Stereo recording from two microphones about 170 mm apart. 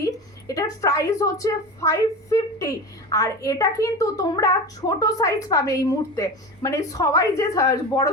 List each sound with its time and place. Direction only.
0.0 s a woman's voice: 20° left (ahead or behind)